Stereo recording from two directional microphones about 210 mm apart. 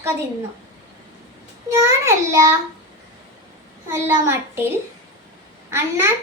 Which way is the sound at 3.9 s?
10° right (ahead or behind).